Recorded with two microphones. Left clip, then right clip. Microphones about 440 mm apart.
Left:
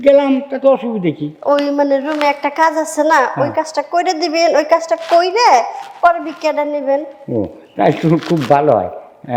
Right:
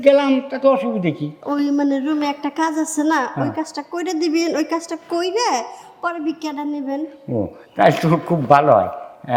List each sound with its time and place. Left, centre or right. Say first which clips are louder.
0.0 s a man's voice: left 3 dB; right
1.5 s a woman's voice: left 7 dB; left
7.3 s a man's voice: left 5 dB; right